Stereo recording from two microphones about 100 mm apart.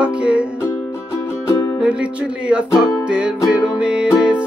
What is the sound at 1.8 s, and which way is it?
Music, 10° right (ahead or behind).